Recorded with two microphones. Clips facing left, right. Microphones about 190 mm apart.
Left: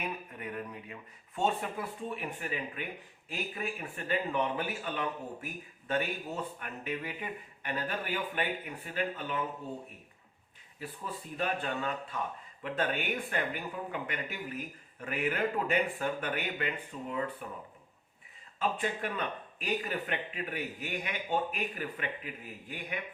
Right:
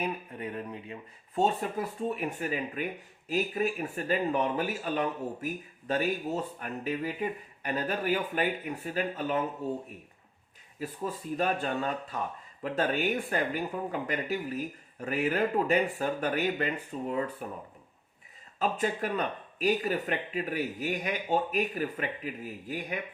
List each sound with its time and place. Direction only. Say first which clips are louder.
0.0 s speech: right 5 dB; 30° right (ahead or behind)
1.4 s speech: right 4 dB; 40° right (ahead or behind)
10.8 s speech: right 6 dB; 40° right (ahead or behind)
18.6 s speech: right 3 dB; 40° right (ahead or behind)